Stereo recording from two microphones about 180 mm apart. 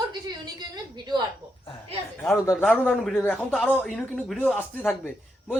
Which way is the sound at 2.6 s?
5° left (ahead or behind).